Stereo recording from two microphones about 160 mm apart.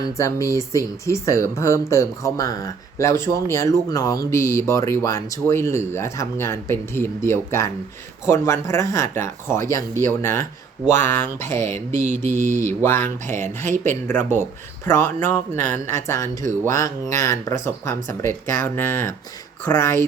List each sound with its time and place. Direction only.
0.0 s speech: 20° left (ahead or behind)